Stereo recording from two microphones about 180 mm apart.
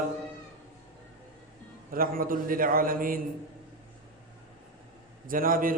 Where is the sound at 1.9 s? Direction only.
55° right (ahead or behind).